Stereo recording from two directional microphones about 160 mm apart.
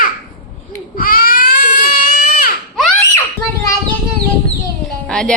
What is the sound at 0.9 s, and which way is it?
Baby cry, 65° left (ahead or behind).